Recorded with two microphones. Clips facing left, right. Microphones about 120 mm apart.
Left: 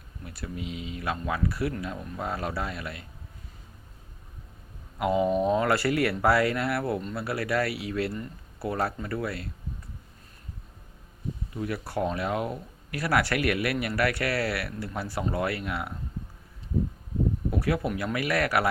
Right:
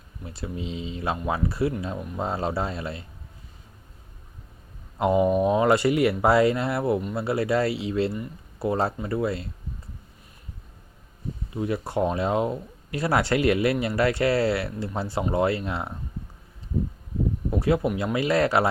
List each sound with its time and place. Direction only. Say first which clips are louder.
0.3 s speech: right 3 dB; 25° right (ahead or behind)
4.9 s speech: right 4 dB; 25° right (ahead or behind)
5.2 s speech: right 3 dB; 10° right (ahead or behind)
11.5 s speech: right 5 dB; 25° right (ahead or behind)
17.5 s speech: right 9 dB; 25° right (ahead or behind)